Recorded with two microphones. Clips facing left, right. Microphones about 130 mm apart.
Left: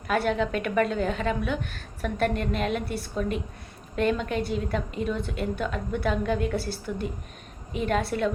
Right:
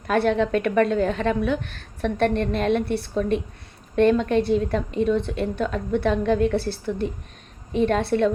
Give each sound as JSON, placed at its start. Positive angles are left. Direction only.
{"t": 0.1, "sound": "a woman's voice", "side_deg": -35}